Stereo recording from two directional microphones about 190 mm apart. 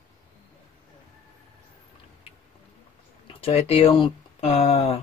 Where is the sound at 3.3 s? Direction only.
30° left (ahead or behind).